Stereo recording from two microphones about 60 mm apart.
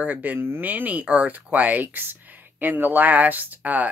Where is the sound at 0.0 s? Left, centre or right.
Right.